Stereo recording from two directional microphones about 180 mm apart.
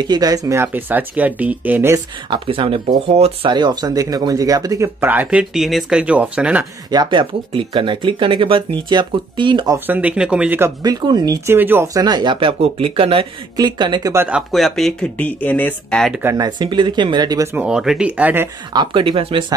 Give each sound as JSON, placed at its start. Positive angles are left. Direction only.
{"t": 0.0, "sound": "speech", "side_deg": -20}
{"t": 2.2, "sound": "speech", "side_deg": -25}
{"t": 6.9, "sound": "speech", "side_deg": -25}
{"t": 9.8, "sound": "speech", "side_deg": -10}
{"t": 10.8, "sound": "speech", "side_deg": -20}
{"t": 14.1, "sound": "speech", "side_deg": -10}
{"t": 14.5, "sound": "speech", "side_deg": 0}
{"t": 16.2, "sound": "speech", "side_deg": -15}
{"t": 16.4, "sound": "speech", "side_deg": -25}
{"t": 17.6, "sound": "speech", "side_deg": -5}
{"t": 18.7, "sound": "speech", "side_deg": -25}